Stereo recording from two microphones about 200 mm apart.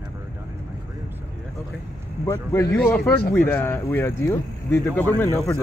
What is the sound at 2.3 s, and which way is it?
Speech, 15° left (ahead or behind).